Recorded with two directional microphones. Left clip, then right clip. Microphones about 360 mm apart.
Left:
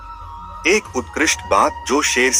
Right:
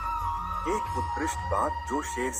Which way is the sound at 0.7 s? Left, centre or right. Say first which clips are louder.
Left 13 dB; left.